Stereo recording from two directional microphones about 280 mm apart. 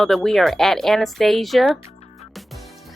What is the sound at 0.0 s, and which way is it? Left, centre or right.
Speech, centre.